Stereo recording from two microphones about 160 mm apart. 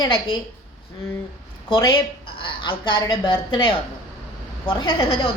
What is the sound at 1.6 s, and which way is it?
A woman's voice, 25° left (ahead or behind).